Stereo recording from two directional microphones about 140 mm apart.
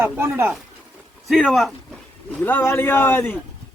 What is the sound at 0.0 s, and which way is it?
Speech, 15° right (ahead or behind).